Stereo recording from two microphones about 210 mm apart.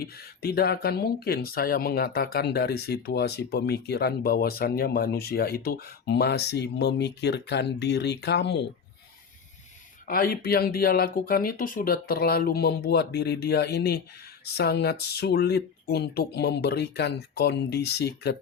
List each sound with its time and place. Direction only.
0.0 s speech: 50° left (ahead or behind)
10.1 s speech: 45° left (ahead or behind)